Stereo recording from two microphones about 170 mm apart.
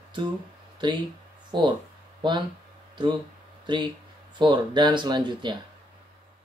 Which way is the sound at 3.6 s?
25° right (ahead or behind).